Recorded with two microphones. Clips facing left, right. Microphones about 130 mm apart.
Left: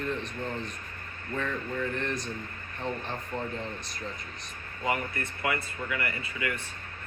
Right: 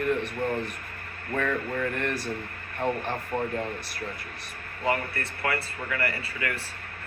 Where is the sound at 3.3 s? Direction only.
55° right (ahead or behind).